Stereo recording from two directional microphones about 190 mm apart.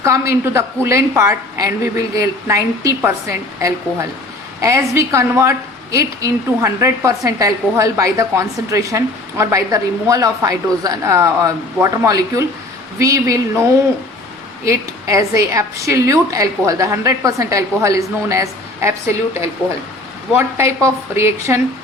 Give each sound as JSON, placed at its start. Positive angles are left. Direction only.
{"t": 0.0, "sound": "a woman's voice", "side_deg": -15}
{"t": 20.8, "sound": "a woman's voice", "side_deg": -15}